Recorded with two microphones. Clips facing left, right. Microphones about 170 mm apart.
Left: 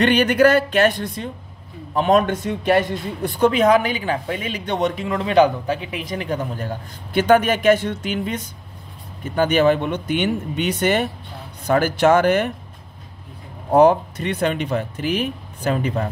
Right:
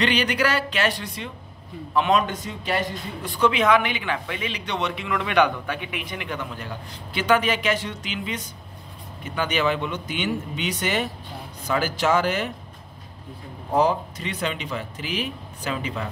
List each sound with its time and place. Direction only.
0.0 s speech: 55° left (ahead or behind)
13.7 s speech: 60° left (ahead or behind)